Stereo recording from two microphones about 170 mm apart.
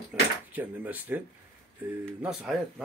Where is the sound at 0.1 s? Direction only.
10° right (ahead or behind).